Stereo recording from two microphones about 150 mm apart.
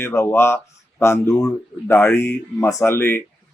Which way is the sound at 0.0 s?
15° left (ahead or behind).